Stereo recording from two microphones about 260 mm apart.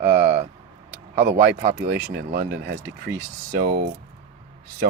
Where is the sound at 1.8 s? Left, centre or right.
Right.